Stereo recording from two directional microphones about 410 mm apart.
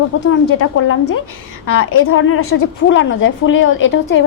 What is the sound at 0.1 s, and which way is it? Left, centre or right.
A woman's voice, left.